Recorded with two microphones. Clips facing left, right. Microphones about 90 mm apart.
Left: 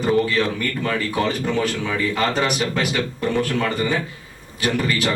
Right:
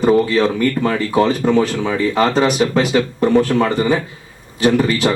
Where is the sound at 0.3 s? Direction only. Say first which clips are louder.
Right 7 dB; 30° right (ahead or behind).